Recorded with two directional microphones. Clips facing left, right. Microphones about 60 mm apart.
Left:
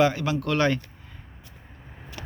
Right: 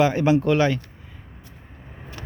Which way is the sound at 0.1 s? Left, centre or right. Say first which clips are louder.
Right 9 dB; right.